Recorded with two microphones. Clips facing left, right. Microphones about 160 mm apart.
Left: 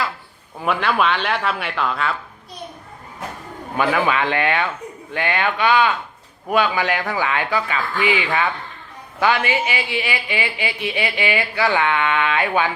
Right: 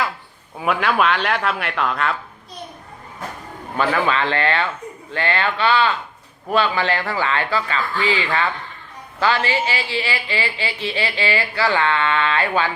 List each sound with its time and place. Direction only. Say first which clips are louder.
0.6 s speech: right 1 dB; centre (ahead or behind)
3.8 s a woman's voice: left 1 dB; 10° left (ahead or behind)